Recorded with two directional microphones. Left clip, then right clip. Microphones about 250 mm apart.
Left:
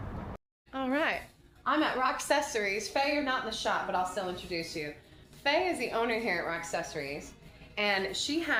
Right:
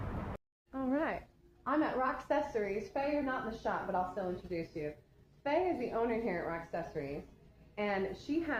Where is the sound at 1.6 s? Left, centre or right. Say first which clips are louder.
Left 5 dB; centre.